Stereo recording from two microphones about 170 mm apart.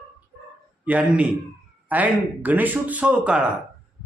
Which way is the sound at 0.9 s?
5° right (ahead or behind).